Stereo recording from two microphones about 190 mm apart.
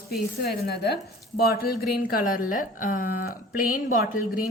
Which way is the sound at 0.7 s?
55° left (ahead or behind).